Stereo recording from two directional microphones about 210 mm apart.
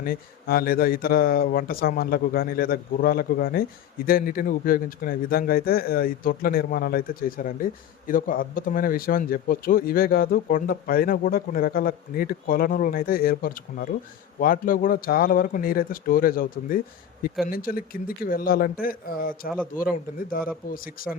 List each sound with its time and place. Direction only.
0.0 s a man's voice: 45° left (ahead or behind)